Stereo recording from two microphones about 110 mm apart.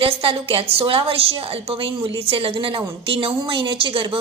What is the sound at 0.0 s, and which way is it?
A woman's voice, 55° right (ahead or behind).